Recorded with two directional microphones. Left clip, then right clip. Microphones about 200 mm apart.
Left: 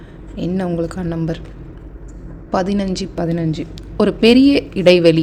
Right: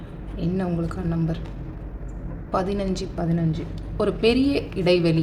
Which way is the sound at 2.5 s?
35° left (ahead or behind).